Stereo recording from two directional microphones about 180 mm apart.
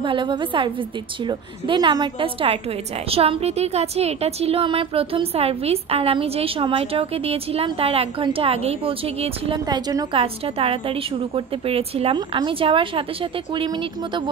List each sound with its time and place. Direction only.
0.0 s a woman's voice: 25° right (ahead or behind)